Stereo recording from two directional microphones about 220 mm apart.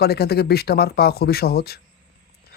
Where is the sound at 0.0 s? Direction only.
45° left (ahead or behind).